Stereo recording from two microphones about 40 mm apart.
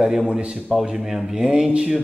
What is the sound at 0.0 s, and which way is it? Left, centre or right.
Speech, centre.